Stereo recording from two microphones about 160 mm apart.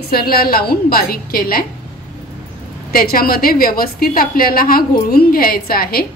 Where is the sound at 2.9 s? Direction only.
65° left (ahead or behind).